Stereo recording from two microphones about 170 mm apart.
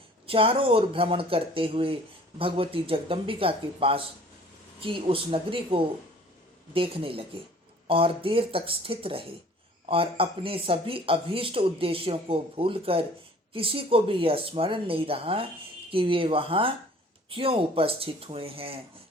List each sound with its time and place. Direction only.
0.3 s speech: 30° right (ahead or behind)